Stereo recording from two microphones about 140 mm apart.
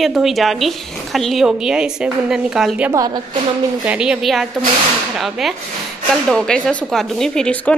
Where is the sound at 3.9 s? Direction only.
5° right (ahead or behind).